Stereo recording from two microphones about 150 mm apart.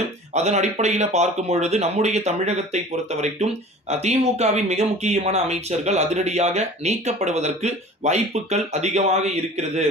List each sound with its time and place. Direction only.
0.3 s speech: 50° right (ahead or behind)